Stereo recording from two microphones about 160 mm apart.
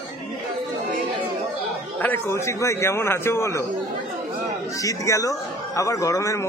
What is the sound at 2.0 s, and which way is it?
A man's voice, 15° left (ahead or behind).